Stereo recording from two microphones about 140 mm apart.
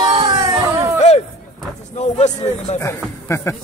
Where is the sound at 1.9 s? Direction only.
55° left (ahead or behind).